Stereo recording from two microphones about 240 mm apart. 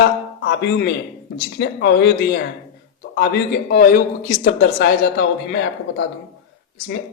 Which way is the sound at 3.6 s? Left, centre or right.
Left.